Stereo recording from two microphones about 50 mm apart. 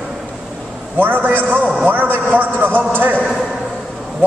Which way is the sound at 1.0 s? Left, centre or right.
Right.